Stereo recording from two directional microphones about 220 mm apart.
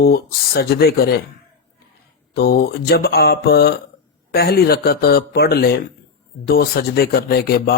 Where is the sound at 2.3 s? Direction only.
45° left (ahead or behind).